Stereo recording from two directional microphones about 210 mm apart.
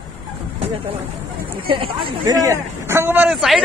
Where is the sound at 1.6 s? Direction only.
25° right (ahead or behind); by 3.6 s centre (ahead or behind).